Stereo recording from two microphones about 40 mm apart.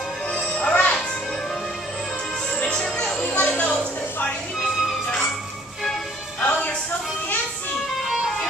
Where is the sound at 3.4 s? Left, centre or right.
Left.